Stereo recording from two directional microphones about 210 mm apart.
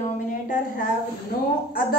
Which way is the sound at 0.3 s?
40° left (ahead or behind).